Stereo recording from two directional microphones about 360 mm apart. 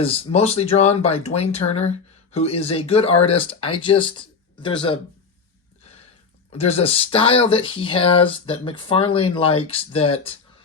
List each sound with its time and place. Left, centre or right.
0.0 s speech: centre
6.5 s speech: centre